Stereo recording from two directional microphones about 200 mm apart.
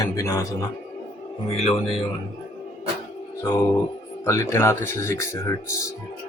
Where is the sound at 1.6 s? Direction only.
30° left (ahead or behind).